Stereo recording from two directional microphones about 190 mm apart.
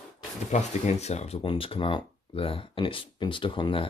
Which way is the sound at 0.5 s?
35° left (ahead or behind).